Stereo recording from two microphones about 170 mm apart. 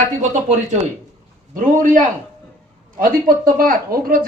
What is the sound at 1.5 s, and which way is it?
A man's voice, 50° right (ahead or behind).